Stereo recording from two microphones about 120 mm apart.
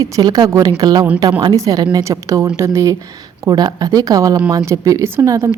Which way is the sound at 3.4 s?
35° right (ahead or behind).